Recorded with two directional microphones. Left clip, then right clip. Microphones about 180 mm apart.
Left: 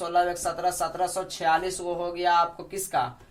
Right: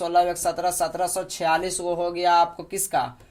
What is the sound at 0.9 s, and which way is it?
Speech, 60° right (ahead or behind).